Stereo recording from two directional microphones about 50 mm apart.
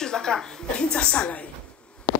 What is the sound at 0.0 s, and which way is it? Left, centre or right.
A woman's voice, centre.